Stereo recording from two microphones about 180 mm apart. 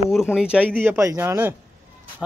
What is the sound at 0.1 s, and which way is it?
Speech, 5° right (ahead or behind).